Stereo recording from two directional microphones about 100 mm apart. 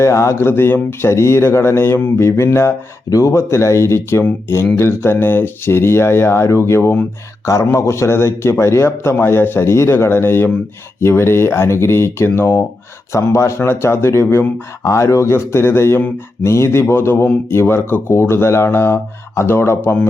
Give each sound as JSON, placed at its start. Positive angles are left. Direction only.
{"t": 0.0, "sound": "speech", "side_deg": 30}